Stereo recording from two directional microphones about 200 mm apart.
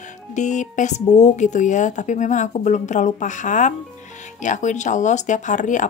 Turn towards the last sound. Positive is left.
turn(degrees=40)  # may be behind; listen again after turning